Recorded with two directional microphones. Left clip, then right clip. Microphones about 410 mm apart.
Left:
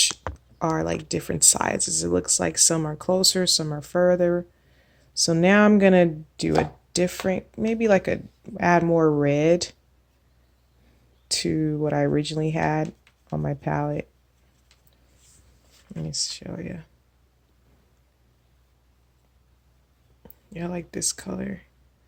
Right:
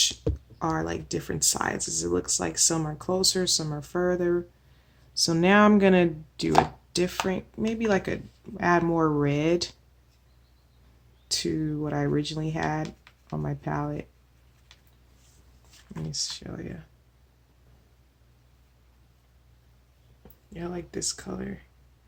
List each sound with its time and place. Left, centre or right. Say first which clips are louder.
0.6 s speech: left 4 dB; centre
11.3 s speech: left 4 dB; centre
16.1 s speech: left 3 dB; centre
20.5 s speech: left 3 dB; centre